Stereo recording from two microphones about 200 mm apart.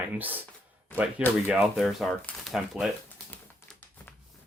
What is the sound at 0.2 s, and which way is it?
Speech, 10° right (ahead or behind).